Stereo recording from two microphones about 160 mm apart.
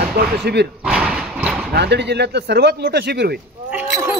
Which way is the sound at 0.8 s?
5° right (ahead or behind).